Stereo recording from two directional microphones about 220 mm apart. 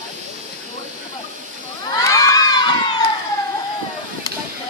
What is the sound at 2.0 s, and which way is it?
Children shouting, 15° left (ahead or behind).